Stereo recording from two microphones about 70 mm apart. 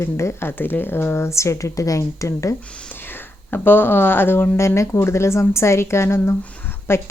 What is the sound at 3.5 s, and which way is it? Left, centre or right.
Speech, left.